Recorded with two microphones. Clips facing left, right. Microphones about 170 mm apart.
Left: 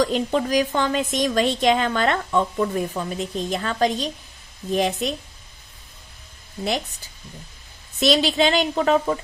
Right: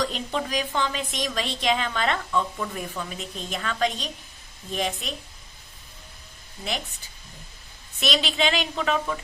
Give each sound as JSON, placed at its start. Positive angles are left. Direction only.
{"t": 0.0, "sound": "a woman's voice", "side_deg": 45}
{"t": 7.9, "sound": "a woman's voice", "side_deg": 35}